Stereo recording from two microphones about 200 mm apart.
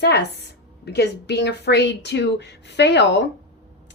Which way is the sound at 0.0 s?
55° left (ahead or behind).